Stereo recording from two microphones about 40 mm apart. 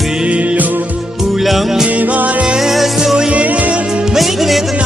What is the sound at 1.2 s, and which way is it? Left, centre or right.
Music, centre.